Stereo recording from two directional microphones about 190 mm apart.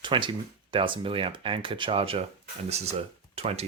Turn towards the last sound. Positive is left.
turn(degrees=-30)  # may be behind; listen again after turning